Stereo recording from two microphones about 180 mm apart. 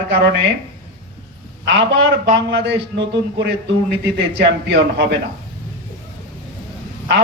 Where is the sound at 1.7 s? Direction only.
80° right.